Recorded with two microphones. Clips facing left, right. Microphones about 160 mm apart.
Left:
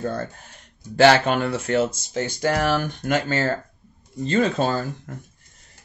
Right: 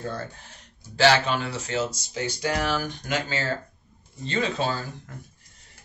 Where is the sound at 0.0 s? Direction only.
50° left (ahead or behind).